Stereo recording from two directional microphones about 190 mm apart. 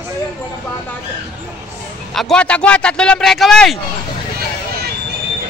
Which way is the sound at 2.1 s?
5° left (ahead or behind).